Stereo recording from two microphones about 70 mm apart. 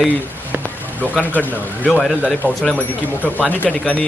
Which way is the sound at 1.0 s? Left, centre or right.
Left.